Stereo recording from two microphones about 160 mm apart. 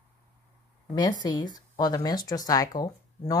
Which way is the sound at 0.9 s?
25° left (ahead or behind).